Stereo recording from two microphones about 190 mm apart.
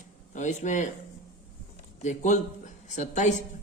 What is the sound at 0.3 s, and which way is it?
Speech, 40° left (ahead or behind).